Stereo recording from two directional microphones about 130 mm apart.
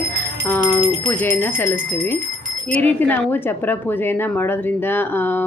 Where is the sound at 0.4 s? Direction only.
15° left (ahead or behind).